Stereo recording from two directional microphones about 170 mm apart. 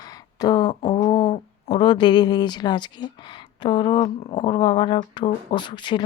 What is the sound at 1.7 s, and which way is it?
Speech, 25° left (ahead or behind).